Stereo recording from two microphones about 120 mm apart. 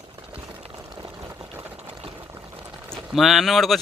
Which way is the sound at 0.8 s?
35° right (ahead or behind).